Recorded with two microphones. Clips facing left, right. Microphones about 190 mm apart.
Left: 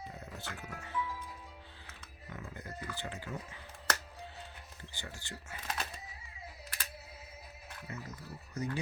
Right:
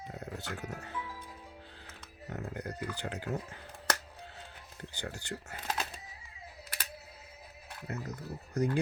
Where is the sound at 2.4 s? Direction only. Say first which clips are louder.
Right 8 dB; 65° right (ahead or behind).